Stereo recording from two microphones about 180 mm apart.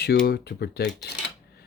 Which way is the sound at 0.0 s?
60° left (ahead or behind).